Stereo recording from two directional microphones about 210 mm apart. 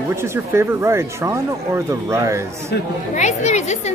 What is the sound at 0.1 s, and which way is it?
Speech, 10° right (ahead or behind).